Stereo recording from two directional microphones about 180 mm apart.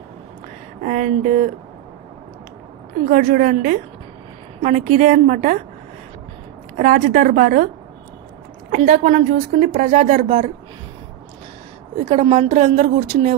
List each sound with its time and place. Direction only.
0.8 s a woman's voice: 45° right (ahead or behind)
3.1 s a woman's voice: 45° right (ahead or behind)
6.8 s a woman's voice: 50° right (ahead or behind)
8.7 s a woman's voice: 40° right (ahead or behind)
12.0 s a woman's voice: 35° right (ahead or behind)